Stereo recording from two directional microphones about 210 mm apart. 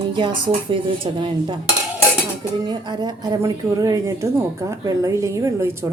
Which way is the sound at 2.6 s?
20° right (ahead or behind).